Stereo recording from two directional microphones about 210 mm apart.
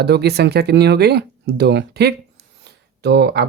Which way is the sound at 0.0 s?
50° right (ahead or behind).